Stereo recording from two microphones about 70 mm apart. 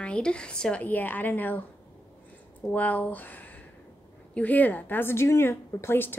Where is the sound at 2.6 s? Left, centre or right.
Left.